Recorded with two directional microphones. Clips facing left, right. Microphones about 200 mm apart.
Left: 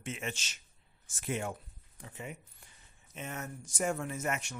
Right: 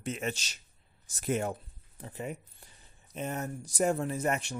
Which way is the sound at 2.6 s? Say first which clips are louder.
Right 4 dB; 35° right (ahead or behind).